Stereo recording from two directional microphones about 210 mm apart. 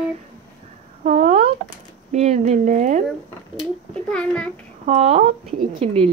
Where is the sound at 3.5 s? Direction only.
Centre (ahead or behind).